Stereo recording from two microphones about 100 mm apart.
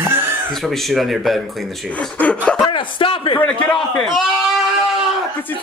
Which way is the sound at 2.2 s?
10° left (ahead or behind).